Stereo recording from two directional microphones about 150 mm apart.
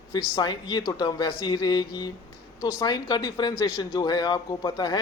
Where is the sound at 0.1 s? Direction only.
25° left (ahead or behind).